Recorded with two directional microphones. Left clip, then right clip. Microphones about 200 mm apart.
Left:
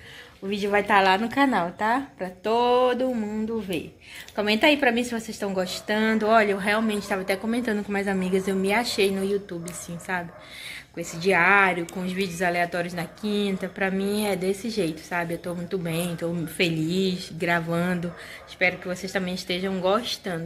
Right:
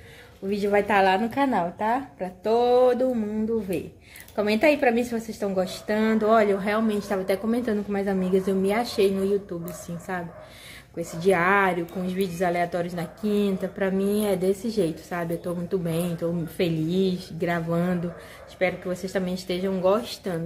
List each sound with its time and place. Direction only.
0.5 s a woman's voice: 5° right (ahead or behind)
11.0 s a woman's voice: 10° right (ahead or behind)